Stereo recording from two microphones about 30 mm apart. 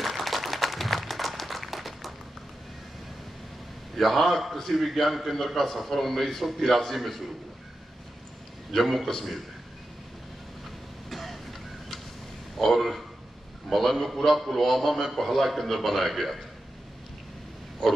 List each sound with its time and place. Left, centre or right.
0.0 s a sound: centre
3.9 s a man's voice: centre
8.7 s a man's voice: centre
11.1 s throat clearing: centre
12.5 s a man's voice: centre
17.8 s pig: centre